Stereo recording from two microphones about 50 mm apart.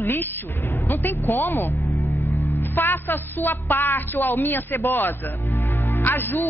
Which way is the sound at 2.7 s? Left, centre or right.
Left.